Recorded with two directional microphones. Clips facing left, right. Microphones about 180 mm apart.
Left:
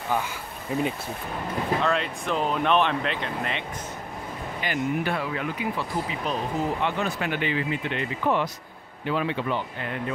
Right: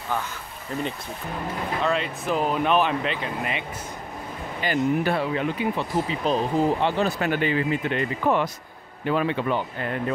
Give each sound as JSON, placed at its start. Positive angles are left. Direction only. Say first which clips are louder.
{"t": 0.7, "sound": "speech", "louder": "left 3 dB", "side_deg": 10}
{"t": 1.8, "sound": "speech", "louder": "right 1 dB", "side_deg": 0}
{"t": 4.6, "sound": "speech", "louder": "right 4 dB", "side_deg": -35}